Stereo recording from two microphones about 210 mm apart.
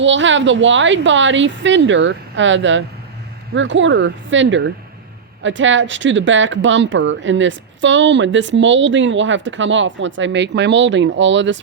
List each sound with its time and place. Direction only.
0.0 s speech: 60° right (ahead or behind)